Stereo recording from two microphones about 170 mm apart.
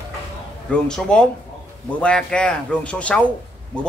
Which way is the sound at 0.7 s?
5° left (ahead or behind).